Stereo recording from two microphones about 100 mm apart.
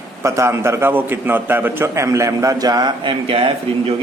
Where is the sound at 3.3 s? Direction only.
65° right (ahead or behind).